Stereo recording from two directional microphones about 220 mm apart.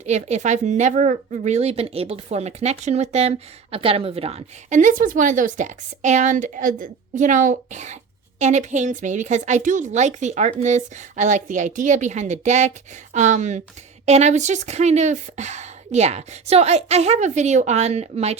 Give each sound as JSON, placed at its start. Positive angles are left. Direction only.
{"t": 0.0, "sound": "a woman's voice", "side_deg": -30}